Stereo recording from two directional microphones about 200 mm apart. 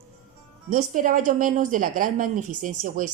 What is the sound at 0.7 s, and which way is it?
Speech, 40° right (ahead or behind).